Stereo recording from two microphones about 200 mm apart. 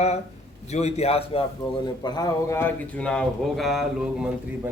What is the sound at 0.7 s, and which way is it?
Speech, 35° left (ahead or behind).